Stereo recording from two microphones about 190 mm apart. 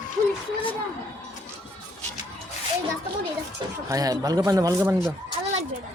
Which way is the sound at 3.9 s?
20° right (ahead or behind).